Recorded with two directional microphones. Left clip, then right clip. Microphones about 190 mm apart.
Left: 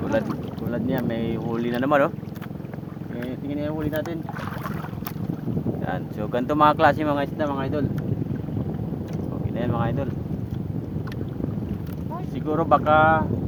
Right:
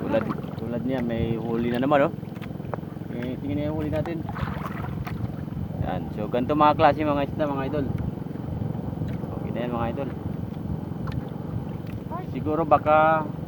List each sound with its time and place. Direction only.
0.7 s speech: 20° right (ahead or behind)
3.7 s speech: 20° right (ahead or behind)
5.8 s speech: 15° right (ahead or behind)
9.6 s speech: 5° right (ahead or behind)
12.5 s speech: centre (ahead or behind)